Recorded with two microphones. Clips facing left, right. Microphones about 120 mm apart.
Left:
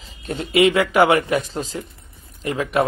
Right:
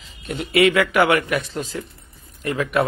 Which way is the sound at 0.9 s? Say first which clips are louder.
Left 4 dB; 35° left (ahead or behind).